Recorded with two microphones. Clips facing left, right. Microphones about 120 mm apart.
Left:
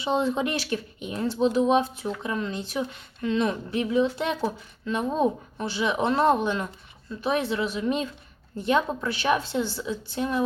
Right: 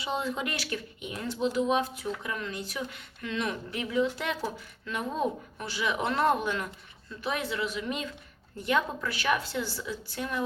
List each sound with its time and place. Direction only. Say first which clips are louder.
0.0 s speech: left 7 dB; 25° left (ahead or behind)